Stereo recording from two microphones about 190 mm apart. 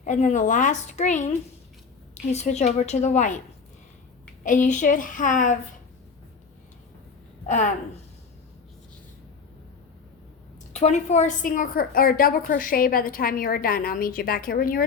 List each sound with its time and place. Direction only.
0.0 s a woman's voice: 40° left (ahead or behind)
2.3 s a woman's voice: 35° left (ahead or behind)
4.4 s a woman's voice: 40° left (ahead or behind)
7.4 s a woman's voice: 40° left (ahead or behind)
10.7 s a woman's voice: 35° left (ahead or behind)